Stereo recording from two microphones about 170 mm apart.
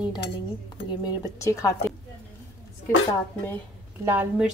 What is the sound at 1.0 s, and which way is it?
Speech, 20° left (ahead or behind).